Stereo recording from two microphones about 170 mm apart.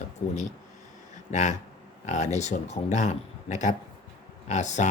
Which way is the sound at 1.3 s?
45° left (ahead or behind).